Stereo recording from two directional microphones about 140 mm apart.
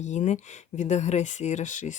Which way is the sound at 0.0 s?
55° left (ahead or behind).